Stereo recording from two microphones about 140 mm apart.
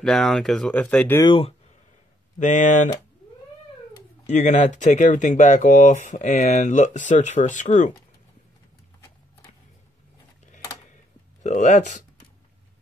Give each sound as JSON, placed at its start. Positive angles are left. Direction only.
{"t": 0.0, "sound": "speech", "side_deg": 5}
{"t": 1.2, "sound": "speech", "side_deg": 40}
{"t": 2.3, "sound": "speech", "side_deg": 60}
{"t": 4.3, "sound": "speech", "side_deg": 55}
{"t": 11.4, "sound": "speech", "side_deg": 60}